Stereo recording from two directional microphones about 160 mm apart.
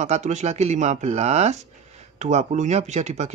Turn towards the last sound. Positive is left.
turn(degrees=-45)  # may be behind; listen again after turning